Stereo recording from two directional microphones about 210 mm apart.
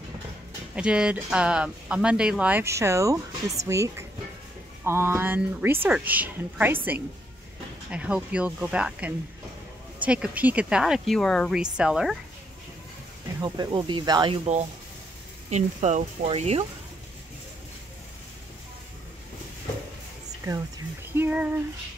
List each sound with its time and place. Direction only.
0.7 s speech: 5° right (ahead or behind)
13.4 s speech: 20° right (ahead or behind)
21.1 s female singing: 10° right (ahead or behind)